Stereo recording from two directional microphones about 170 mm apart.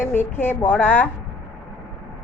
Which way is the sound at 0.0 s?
10° left (ahead or behind).